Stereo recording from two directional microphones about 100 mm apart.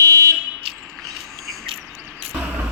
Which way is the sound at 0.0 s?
35° right (ahead or behind).